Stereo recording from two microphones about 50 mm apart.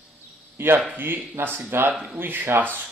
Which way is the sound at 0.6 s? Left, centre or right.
Right.